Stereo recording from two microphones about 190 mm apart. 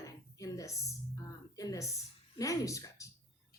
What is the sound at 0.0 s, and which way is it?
Music, 15° left (ahead or behind).